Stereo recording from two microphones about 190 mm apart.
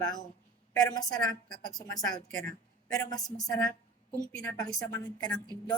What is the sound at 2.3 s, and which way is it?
Speech, 5° left (ahead or behind).